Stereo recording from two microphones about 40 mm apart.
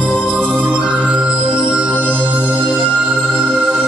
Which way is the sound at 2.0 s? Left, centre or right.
Right.